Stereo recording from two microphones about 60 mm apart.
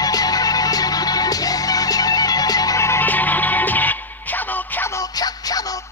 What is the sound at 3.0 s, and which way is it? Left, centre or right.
Music, left.